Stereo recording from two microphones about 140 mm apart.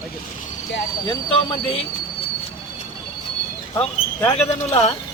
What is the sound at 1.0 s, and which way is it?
Speech, 30° left (ahead or behind).